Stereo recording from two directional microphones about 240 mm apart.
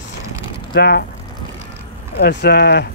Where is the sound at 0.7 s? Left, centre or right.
Left.